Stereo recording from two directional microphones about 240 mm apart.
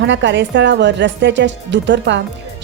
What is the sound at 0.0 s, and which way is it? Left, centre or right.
A woman's voice, right.